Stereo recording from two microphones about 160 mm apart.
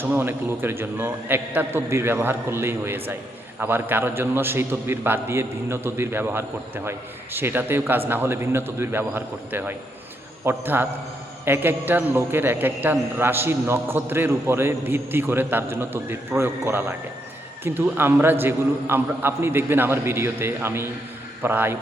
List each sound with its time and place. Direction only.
0.0 s a man's voice: 15° right (ahead or behind)